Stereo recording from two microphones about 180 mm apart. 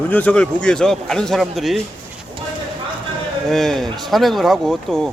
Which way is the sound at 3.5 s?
Centre (ahead or behind).